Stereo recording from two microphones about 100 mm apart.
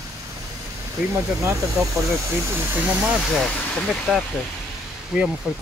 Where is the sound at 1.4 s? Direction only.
30° right (ahead or behind).